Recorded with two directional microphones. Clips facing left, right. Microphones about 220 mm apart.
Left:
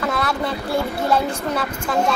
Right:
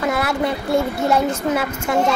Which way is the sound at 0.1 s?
25° right (ahead or behind).